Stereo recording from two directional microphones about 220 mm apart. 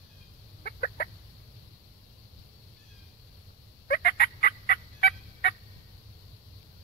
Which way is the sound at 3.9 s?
45° left (ahead or behind).